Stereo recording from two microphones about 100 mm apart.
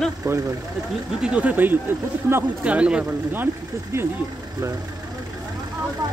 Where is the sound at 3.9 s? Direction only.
30° right (ahead or behind).